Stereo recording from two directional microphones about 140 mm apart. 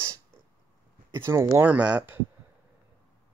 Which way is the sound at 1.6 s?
10° right (ahead or behind).